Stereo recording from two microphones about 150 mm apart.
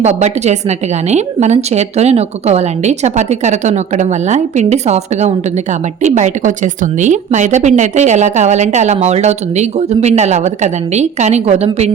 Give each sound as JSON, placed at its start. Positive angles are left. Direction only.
{"t": 0.0, "sound": "a woman's voice", "side_deg": -45}